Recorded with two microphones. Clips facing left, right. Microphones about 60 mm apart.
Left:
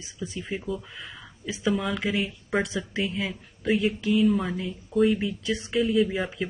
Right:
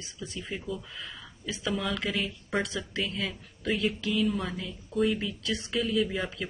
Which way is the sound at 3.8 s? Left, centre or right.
Left.